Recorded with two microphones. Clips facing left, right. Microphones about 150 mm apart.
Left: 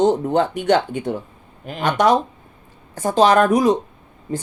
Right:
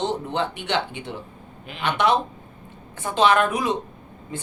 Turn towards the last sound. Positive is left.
turn(degrees=40)  # may be behind; listen again after turning